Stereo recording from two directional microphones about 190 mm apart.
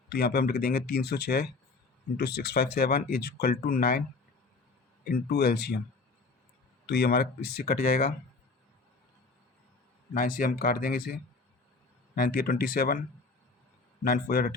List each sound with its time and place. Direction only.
0.1 s speech: 55° left (ahead or behind)
5.0 s speech: 55° left (ahead or behind)
6.8 s speech: 60° left (ahead or behind)
10.2 s speech: 45° left (ahead or behind)